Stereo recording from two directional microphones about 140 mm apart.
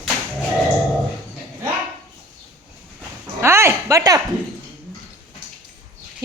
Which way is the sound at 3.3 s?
20° right (ahead or behind).